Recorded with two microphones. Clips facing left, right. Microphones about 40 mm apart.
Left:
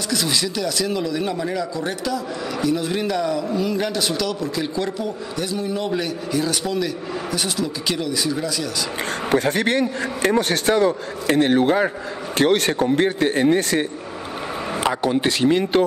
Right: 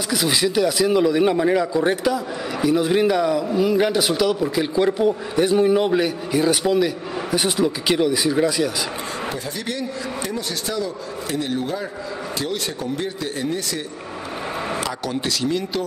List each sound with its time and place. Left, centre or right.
0.1 s speech: centre
9.3 s a man's voice: left
14.8 s speech: left